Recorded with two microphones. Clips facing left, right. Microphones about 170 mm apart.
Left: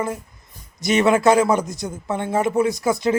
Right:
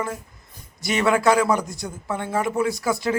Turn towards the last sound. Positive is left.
turn(degrees=20)  # may be behind; listen again after turning